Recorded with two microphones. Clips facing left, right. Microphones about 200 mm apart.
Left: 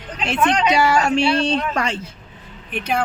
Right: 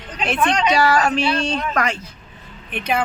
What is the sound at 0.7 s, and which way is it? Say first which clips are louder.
Speech: left 1 dB; 25° left (ahead or behind).